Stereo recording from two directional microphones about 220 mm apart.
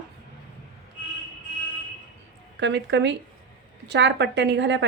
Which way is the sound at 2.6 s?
55° right (ahead or behind).